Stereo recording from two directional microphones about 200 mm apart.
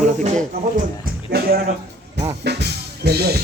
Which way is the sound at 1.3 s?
50° right (ahead or behind).